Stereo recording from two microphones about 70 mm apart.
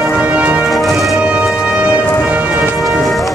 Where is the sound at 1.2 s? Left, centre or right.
Centre.